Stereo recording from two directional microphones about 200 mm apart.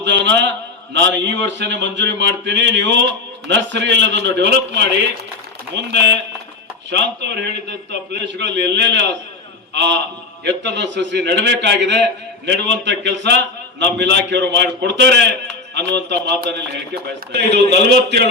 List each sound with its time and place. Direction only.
0.0 s a man's voice: 60° right (ahead or behind)
6.9 s a man's voice: 60° right (ahead or behind)